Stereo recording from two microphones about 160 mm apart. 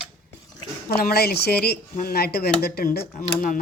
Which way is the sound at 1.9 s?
70° left (ahead or behind).